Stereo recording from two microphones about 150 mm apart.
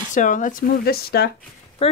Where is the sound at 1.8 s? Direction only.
40° left (ahead or behind).